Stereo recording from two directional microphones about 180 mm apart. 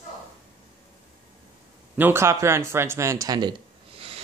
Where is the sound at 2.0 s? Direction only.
15° right (ahead or behind).